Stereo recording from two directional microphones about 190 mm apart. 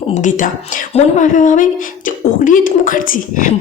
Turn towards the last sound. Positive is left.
turn(degrees=45)  # may be behind; listen again after turning